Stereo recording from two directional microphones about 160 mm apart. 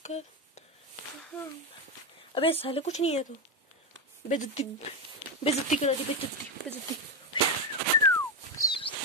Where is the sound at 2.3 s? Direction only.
35° left (ahead or behind).